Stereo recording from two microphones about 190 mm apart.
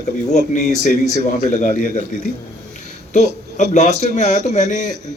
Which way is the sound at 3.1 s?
40° left (ahead or behind).